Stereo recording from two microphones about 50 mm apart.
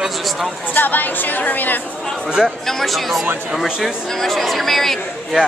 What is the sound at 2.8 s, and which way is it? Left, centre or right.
Speech, centre.